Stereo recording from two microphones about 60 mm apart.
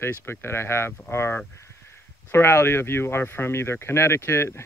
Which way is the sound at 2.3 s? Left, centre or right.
Left.